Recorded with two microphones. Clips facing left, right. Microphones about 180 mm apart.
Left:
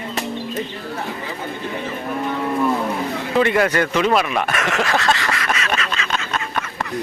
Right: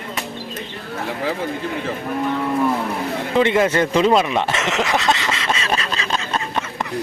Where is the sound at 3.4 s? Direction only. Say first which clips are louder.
Right 1 dB; 20° right (ahead or behind).